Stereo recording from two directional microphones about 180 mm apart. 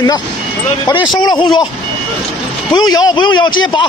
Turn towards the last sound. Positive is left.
turn(degrees=25)  # may be behind; listen again after turning